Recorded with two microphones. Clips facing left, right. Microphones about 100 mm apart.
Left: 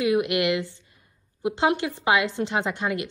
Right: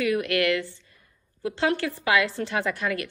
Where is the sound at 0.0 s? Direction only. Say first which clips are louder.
Left 2 dB; 20° left (ahead or behind).